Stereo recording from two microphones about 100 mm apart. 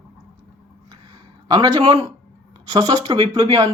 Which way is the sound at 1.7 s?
35° right (ahead or behind).